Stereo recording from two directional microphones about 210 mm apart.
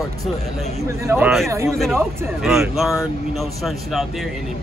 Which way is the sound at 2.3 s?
Centre (ahead or behind).